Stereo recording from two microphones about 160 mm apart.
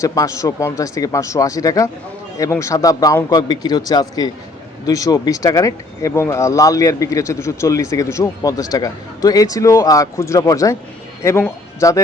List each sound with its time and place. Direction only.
0.0 s a man's voice: 20° left (ahead or behind)